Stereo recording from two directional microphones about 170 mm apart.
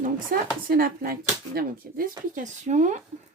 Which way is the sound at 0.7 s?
60° right (ahead or behind).